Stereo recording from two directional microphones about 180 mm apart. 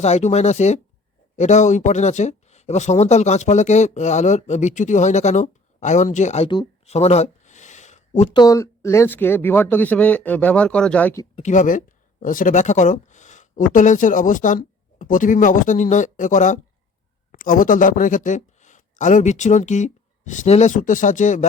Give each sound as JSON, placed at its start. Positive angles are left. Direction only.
{"t": 0.0, "sound": "speech", "side_deg": 40}
{"t": 8.3, "sound": "speech", "side_deg": 20}
{"t": 11.3, "sound": "speech", "side_deg": 45}